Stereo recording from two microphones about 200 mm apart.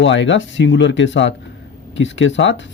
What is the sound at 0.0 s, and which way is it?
Speech, 65° left (ahead or behind).